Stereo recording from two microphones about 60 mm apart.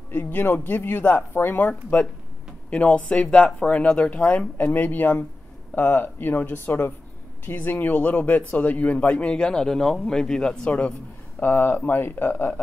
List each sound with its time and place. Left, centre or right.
0.1 s speech: left
4.6 s speech: left
11.3 s speech: left